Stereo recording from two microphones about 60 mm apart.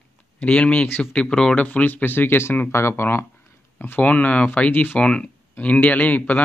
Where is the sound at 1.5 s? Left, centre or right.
Left.